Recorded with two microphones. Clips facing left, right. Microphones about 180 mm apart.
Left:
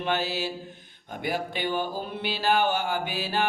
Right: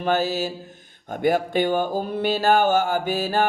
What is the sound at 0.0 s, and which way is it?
Mantra, 40° right (ahead or behind).